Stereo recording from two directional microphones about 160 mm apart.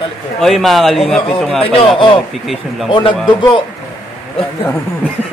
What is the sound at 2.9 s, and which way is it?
Speech, 30° left (ahead or behind).